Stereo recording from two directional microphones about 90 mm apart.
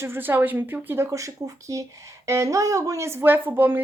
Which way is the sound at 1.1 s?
40° right (ahead or behind).